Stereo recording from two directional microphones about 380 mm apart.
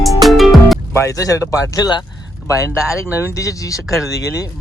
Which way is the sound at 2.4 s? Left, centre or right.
Centre.